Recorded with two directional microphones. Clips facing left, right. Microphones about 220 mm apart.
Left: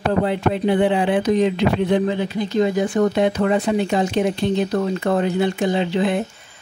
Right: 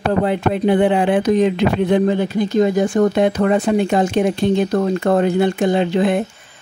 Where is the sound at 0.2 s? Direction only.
50° right (ahead or behind).